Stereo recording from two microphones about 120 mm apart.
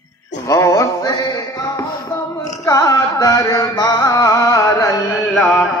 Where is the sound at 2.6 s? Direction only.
25° left (ahead or behind).